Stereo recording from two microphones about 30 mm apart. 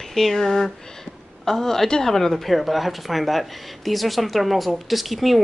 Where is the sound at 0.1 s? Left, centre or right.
Centre.